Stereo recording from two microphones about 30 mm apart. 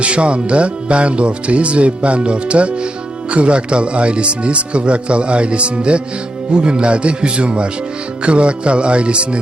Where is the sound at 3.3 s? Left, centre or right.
Right.